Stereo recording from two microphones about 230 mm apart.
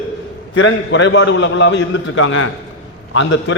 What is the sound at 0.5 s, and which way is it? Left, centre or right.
A man's voice, left.